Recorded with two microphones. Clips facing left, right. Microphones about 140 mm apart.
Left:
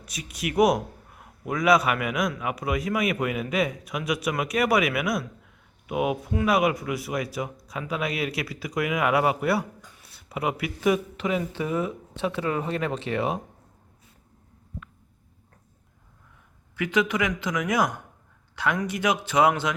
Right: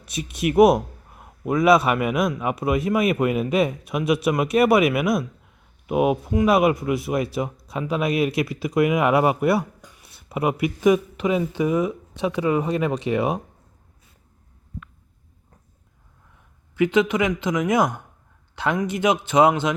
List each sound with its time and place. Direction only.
0.0 s speech: 25° right (ahead or behind)
16.7 s speech: 25° right (ahead or behind)